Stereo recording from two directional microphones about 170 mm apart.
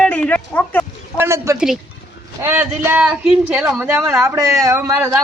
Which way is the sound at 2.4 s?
15° right (ahead or behind).